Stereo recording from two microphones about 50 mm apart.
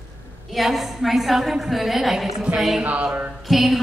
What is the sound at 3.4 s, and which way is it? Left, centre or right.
Speech, centre.